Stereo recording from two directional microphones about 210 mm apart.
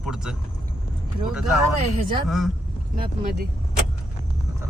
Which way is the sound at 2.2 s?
Centre (ahead or behind).